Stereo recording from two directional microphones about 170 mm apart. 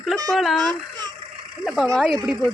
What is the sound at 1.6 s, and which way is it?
Speech, centre (ahead or behind).